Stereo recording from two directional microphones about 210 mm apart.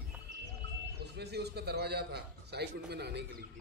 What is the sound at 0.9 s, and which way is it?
A man's voice, 50° right (ahead or behind).